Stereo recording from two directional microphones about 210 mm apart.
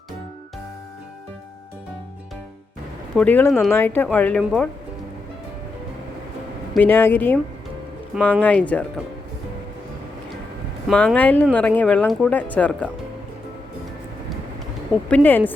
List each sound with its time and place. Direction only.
3.2 s speech: 10° left (ahead or behind)
6.7 s speech: 10° left (ahead or behind)
10.8 s speech: 5° left (ahead or behind)
15.1 s speech: 10° left (ahead or behind)